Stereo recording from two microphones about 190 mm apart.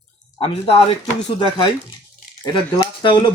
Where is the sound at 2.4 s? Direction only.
25° left (ahead or behind).